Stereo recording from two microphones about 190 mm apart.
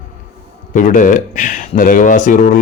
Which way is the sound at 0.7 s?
40° left (ahead or behind).